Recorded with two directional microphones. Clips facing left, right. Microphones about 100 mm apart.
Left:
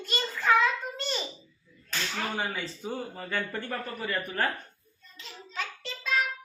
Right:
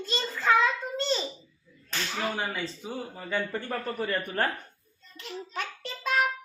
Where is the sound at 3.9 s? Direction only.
35° right (ahead or behind).